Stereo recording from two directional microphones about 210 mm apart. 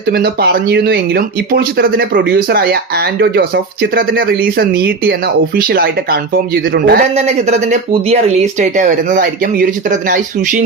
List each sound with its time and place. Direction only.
0.1 s speech: 50° right (ahead or behind)
7.2 s speech: 30° right (ahead or behind)